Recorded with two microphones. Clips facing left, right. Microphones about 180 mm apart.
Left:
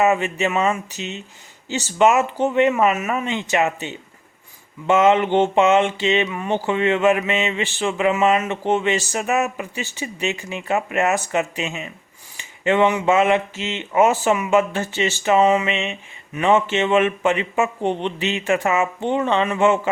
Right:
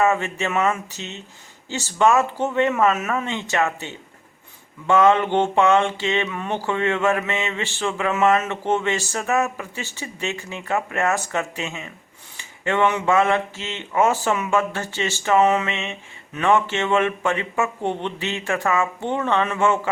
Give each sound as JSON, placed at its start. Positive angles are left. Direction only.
{"t": 0.0, "sound": "speech", "side_deg": 15}
{"t": 4.9, "sound": "mantra", "side_deg": 20}
{"t": 6.3, "sound": "speech", "side_deg": 10}
{"t": 12.4, "sound": "a sound", "side_deg": 15}
{"t": 13.1, "sound": "speech", "side_deg": 20}